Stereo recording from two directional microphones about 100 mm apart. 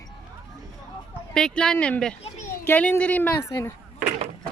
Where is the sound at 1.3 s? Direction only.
5° left (ahead or behind).